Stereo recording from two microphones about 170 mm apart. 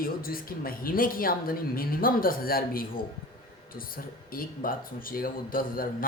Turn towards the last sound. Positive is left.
turn(degrees=55)  # may be behind; listen again after turning